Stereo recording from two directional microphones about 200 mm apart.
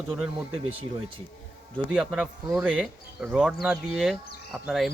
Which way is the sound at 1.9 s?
5° right (ahead or behind).